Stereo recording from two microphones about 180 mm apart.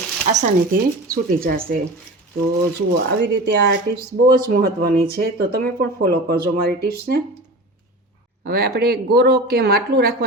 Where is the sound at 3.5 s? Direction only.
70° right (ahead or behind).